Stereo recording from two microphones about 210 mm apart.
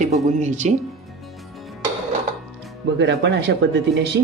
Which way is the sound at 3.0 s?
60° right (ahead or behind).